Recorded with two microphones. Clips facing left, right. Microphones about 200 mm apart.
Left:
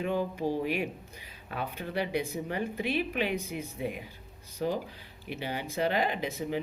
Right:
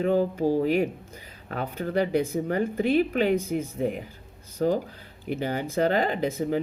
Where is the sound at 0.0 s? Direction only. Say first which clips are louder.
Right 7 dB; 40° right (ahead or behind).